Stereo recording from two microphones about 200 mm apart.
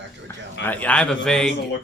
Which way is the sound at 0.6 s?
10° left (ahead or behind).